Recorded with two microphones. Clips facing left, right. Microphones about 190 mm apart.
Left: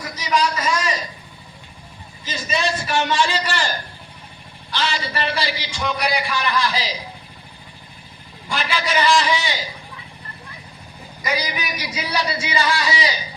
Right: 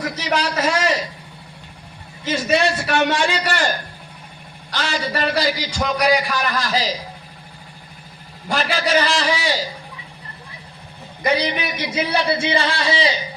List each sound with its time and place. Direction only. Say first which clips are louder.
0.0 s a sound: even; 70° right (ahead or behind)
2.2 s a man's voice: right 6 dB; 65° right (ahead or behind); by 6.9 s 45° right (ahead or behind)
8.4 s a man's voice: right 4 dB; 40° right (ahead or behind)
11.3 s a man's voice: right 5 dB; 25° right (ahead or behind)
11.9 s a man's voice: right 4 dB; 55° right (ahead or behind)
12.6 s a man's voice: right 1 dB; 30° right (ahead or behind)